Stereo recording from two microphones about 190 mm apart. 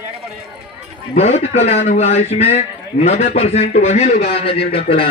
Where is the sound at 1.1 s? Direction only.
35° left (ahead or behind).